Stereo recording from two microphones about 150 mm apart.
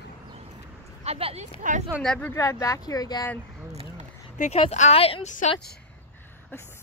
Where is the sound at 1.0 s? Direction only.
45° right (ahead or behind).